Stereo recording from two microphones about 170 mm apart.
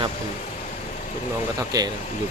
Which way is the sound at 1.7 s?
20° right (ahead or behind).